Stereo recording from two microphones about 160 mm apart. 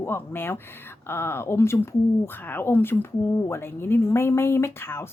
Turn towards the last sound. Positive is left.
turn(degrees=15)  # may be behind; listen again after turning